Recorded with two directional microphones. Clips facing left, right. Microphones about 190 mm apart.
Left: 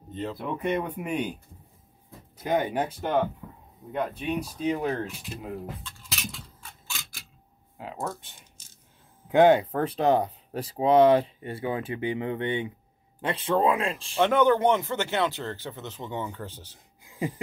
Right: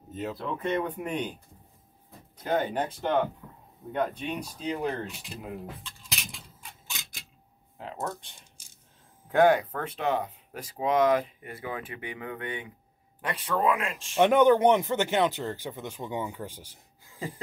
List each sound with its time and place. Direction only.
0.1 s speech: 5° right (ahead or behind)
0.4 s speech: 15° left (ahead or behind)
2.3 s speech: 15° left (ahead or behind)
6.6 s a sound: 20° right (ahead or behind)
7.7 s speech: 5° left (ahead or behind)
9.3 s speech: 20° left (ahead or behind)
14.1 s speech: 15° right (ahead or behind)
17.0 s a sound: 15° left (ahead or behind)